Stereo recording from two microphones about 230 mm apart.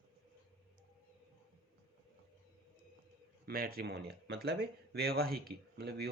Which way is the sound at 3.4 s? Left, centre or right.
Right.